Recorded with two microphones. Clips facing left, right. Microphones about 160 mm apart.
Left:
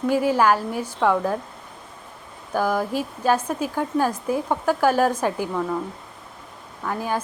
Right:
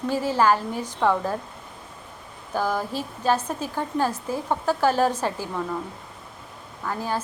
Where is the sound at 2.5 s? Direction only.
10° left (ahead or behind).